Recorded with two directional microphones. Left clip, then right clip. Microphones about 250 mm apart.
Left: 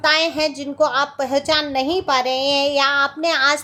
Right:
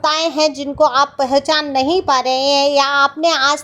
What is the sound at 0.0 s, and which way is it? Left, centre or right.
A child's voice, centre.